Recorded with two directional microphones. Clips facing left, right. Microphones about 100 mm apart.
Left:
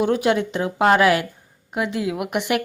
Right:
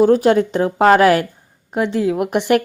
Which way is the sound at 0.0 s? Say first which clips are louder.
Right 7 dB; 35° right (ahead or behind).